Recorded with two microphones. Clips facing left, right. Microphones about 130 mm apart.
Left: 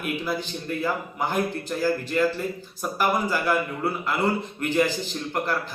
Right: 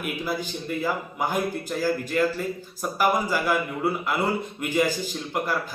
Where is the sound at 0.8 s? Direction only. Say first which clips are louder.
Even; 10° right (ahead or behind).